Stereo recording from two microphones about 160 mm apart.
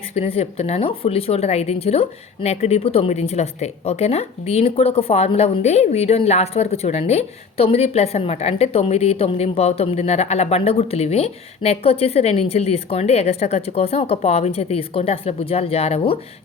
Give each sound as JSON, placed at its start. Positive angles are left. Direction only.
{"t": 0.1, "sound": "speech", "side_deg": 40}